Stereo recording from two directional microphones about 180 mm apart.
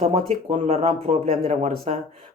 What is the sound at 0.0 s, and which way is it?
Speech, 35° right (ahead or behind).